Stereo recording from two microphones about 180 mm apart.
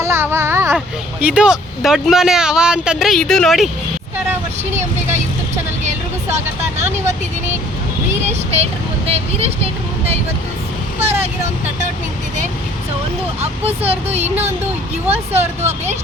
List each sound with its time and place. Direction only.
0.0 s a sound: 15° right (ahead or behind)
1.2 s speech: 5° right (ahead or behind)
6.3 s speech: 40° right (ahead or behind)
8.3 s speech: 35° right (ahead or behind)
11.0 s speech: 35° right (ahead or behind)
13.4 s speech: 35° right (ahead or behind)
15.1 s speech: 35° right (ahead or behind)